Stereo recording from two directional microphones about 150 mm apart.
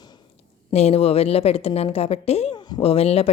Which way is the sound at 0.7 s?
45° left (ahead or behind).